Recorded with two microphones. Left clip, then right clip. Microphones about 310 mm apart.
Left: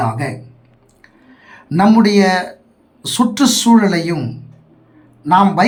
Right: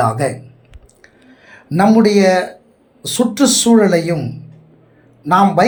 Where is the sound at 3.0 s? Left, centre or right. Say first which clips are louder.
Even; centre.